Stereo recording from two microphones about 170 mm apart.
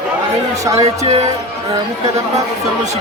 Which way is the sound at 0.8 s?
40° right (ahead or behind).